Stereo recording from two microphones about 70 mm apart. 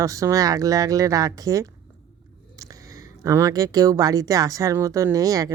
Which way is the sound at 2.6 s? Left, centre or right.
Right.